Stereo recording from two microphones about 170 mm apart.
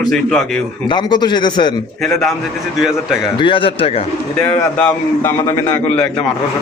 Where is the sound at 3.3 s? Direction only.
30° left (ahead or behind).